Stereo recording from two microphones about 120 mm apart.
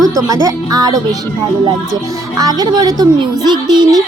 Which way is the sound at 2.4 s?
30° right (ahead or behind).